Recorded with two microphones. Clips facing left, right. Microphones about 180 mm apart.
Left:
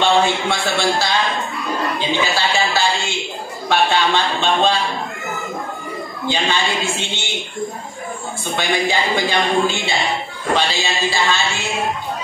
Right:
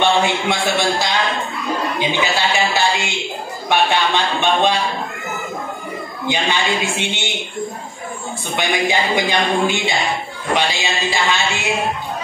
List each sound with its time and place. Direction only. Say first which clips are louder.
0.0 s a man's voice: even; 15° right (ahead or behind)
2.5 s a man's voice: right 1 dB; 15° right (ahead or behind)
6.2 s a man's voice: right 1 dB; 15° right (ahead or behind)
8.5 s a man's voice: right 1 dB; 15° right (ahead or behind)